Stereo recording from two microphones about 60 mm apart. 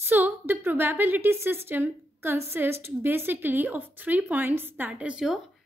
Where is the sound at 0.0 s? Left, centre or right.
Right.